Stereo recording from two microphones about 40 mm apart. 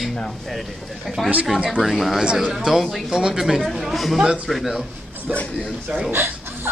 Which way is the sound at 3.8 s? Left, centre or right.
Centre.